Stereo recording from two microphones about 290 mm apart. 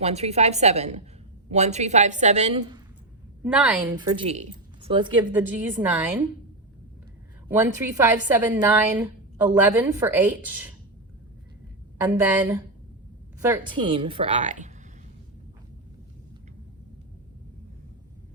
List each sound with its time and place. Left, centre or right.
0.0 s a woman's voice: right
3.4 s a woman's voice: centre
5.3 s a woman's voice: centre
7.4 s a woman's voice: centre
12.0 s a woman's voice: centre; by 14.7 s right